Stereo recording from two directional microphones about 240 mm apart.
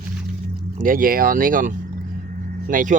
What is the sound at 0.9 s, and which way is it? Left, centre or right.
Speech, right.